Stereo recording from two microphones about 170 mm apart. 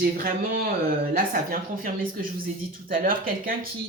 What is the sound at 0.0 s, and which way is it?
Speech, 60° right (ahead or behind).